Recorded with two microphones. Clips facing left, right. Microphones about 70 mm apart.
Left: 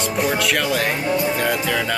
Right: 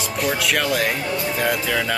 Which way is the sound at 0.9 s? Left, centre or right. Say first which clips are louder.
Left 4 dB; left.